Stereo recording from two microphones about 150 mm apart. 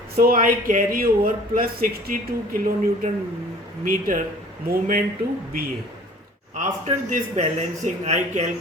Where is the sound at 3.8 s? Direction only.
65° right (ahead or behind).